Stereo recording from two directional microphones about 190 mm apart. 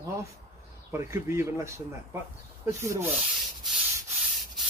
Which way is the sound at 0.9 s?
15° right (ahead or behind).